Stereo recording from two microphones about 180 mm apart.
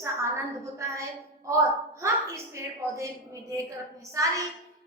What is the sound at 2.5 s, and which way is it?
Speech, 15° right (ahead or behind).